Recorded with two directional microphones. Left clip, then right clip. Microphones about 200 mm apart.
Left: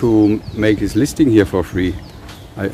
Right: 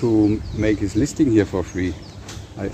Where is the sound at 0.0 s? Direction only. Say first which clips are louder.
Left 5 dB; 25° left (ahead or behind).